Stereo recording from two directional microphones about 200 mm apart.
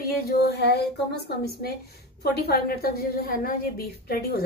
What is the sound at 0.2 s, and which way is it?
A woman's voice, 50° left (ahead or behind).